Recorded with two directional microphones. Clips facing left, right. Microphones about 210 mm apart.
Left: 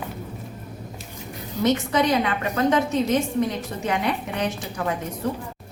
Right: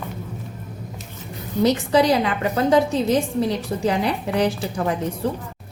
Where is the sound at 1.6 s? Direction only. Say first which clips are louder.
Right 3 dB; 30° right (ahead or behind).